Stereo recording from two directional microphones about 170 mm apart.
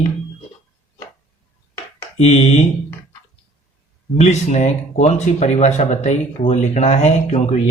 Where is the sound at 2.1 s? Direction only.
40° left (ahead or behind).